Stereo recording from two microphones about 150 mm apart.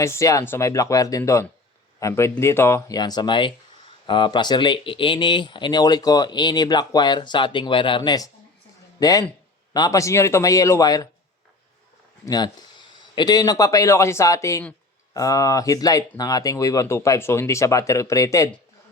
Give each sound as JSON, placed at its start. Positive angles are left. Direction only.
{"t": 0.0, "sound": "speech", "side_deg": 20}
{"t": 12.2, "sound": "speech", "side_deg": 25}